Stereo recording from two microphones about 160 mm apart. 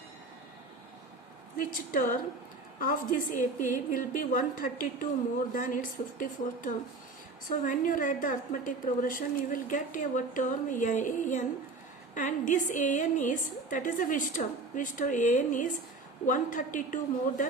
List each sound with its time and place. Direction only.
1.5 s a woman's voice: 60° left (ahead or behind)